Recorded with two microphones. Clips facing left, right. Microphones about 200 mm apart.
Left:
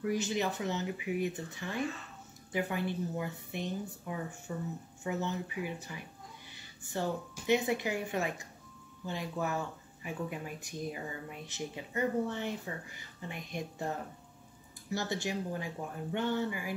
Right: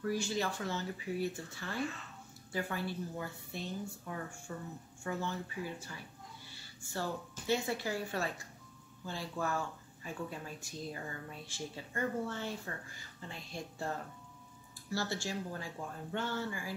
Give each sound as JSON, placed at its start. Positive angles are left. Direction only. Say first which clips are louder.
{"t": 0.0, "sound": "a woman's voice", "louder": "left 3 dB", "side_deg": 20}